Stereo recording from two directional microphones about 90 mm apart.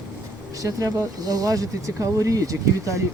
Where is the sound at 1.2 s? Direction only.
45° right (ahead or behind).